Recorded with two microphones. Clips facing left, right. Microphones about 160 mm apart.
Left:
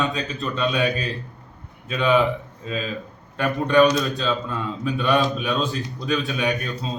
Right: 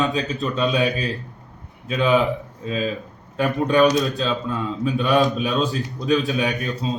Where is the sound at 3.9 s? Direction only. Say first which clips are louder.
Right 2 dB; centre (ahead or behind).